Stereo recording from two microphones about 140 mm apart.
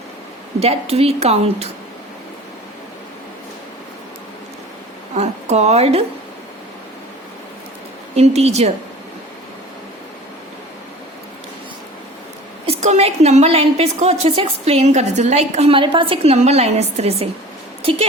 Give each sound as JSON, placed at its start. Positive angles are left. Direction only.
{"t": 0.6, "sound": "a woman's voice", "side_deg": -45}
{"t": 5.1, "sound": "speech", "side_deg": -50}
{"t": 8.1, "sound": "a woman's voice", "side_deg": -50}
{"t": 12.6, "sound": "a woman's voice", "side_deg": -50}